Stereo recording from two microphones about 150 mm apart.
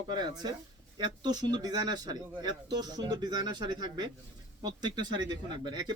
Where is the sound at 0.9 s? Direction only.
30° right (ahead or behind).